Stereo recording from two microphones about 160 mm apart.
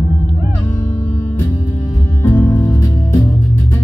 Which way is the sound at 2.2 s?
15° left (ahead or behind).